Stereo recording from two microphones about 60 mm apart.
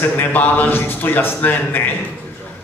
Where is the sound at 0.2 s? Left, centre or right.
Left.